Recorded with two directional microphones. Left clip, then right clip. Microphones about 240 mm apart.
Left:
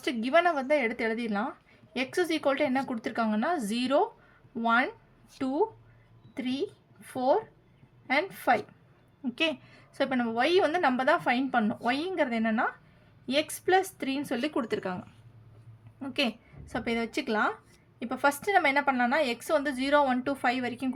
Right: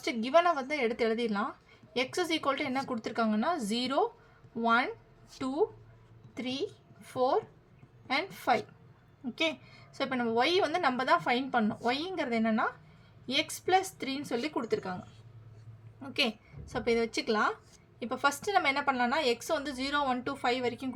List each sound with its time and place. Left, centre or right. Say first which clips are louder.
0.0 s a woman's voice: left 1 dB; left
7.0 s a woman's voice: left 2 dB; left
16.6 s a woman's voice: right 2 dB; left